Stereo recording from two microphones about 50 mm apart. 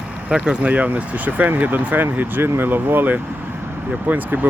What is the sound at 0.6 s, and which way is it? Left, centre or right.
Speech, right.